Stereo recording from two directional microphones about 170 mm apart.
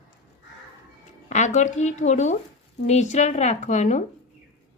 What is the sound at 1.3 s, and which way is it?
A woman's voice, 45° left (ahead or behind).